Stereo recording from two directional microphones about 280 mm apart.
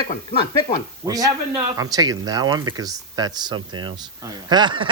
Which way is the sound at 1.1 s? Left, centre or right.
Centre.